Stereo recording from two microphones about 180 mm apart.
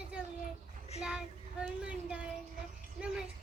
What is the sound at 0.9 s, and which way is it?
Speech, 35° left (ahead or behind).